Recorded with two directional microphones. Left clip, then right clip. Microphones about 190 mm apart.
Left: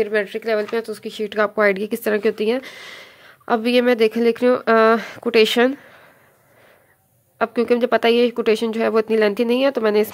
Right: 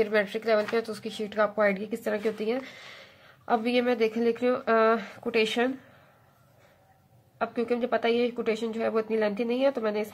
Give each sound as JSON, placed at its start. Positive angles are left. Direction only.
{"t": 0.0, "sound": "speech", "side_deg": 35}
{"t": 7.3, "sound": "speech", "side_deg": 55}